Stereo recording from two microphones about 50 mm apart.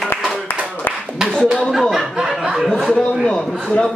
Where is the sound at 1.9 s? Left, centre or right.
Centre.